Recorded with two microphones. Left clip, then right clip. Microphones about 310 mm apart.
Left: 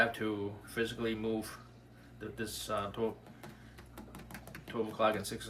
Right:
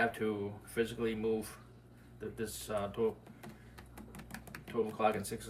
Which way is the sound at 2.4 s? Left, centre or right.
Centre.